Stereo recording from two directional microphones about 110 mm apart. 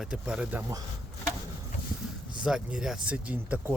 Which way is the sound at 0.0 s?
10° right (ahead or behind).